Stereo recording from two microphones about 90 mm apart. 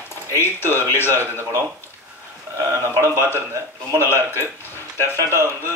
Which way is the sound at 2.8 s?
30° right (ahead or behind).